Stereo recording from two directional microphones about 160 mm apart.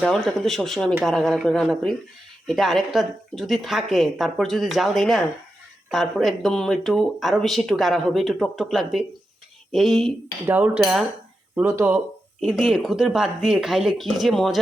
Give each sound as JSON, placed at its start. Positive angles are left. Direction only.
{"t": 0.0, "sound": "speech", "side_deg": 0}
{"t": 10.4, "sound": "speech", "side_deg": -10}
{"t": 10.8, "sound": "speech", "side_deg": 0}
{"t": 11.5, "sound": "speech", "side_deg": -15}
{"t": 12.4, "sound": "speech", "side_deg": -5}